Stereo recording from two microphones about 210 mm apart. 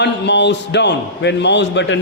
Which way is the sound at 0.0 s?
55° left (ahead or behind).